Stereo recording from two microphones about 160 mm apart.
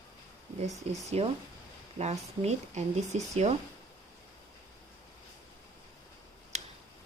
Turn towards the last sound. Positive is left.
turn(degrees=-45)  # may be behind; listen again after turning